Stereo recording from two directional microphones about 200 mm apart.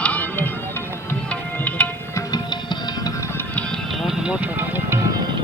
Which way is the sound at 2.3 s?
20° left (ahead or behind).